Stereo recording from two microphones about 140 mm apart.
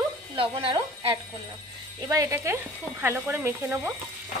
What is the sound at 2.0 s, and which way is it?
A woman's voice, 20° right (ahead or behind).